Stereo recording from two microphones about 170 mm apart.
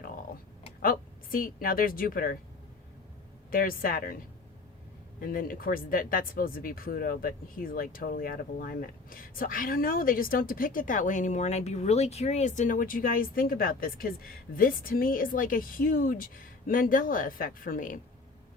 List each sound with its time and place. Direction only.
0.8 s speech: 55° left (ahead or behind)
3.5 s speech: 60° left (ahead or behind)
5.2 s speech: 55° left (ahead or behind)